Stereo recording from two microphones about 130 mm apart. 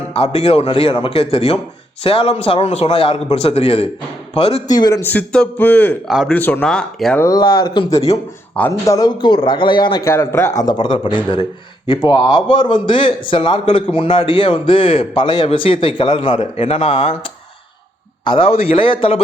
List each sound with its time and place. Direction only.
0.1 s a man's voice: 50° left (ahead or behind)
4.7 s speech: 30° left (ahead or behind)
5.0 s a man's voice: 10° left (ahead or behind)
6.1 s speech: 5° right (ahead or behind)
6.3 s a man's voice: 10° left (ahead or behind)
7.2 s a man's voice: 30° left (ahead or behind)
8.6 s a man's voice: 10° left (ahead or behind)
8.9 s a man's voice: 30° left (ahead or behind)
10.0 s a man's voice: 20° left (ahead or behind); by 19.2 s 45° left (ahead or behind)